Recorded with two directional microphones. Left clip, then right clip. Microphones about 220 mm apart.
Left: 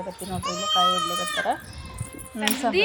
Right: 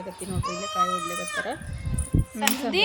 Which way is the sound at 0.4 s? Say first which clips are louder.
Left 4 dB; 30° left (ahead or behind).